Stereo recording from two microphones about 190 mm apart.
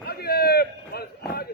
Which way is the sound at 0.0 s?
55° left (ahead or behind).